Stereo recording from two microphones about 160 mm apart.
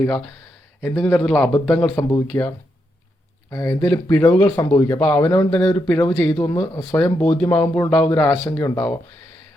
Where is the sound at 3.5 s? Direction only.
20° left (ahead or behind).